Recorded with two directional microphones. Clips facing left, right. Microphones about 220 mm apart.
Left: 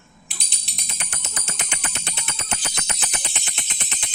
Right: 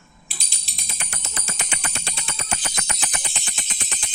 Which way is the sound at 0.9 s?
20° left (ahead or behind).